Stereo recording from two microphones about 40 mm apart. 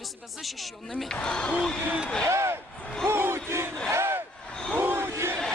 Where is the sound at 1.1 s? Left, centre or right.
Centre.